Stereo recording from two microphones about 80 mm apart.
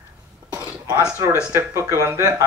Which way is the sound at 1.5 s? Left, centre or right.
Right.